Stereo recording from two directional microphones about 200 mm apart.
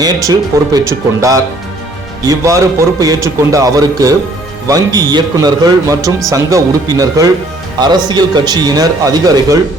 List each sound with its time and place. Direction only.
0.0 s a man's voice: 20° right (ahead or behind)